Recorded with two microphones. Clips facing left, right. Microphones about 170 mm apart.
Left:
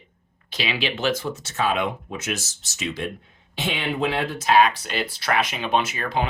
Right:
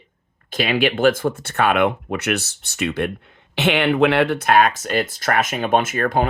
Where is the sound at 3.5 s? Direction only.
70° right (ahead or behind).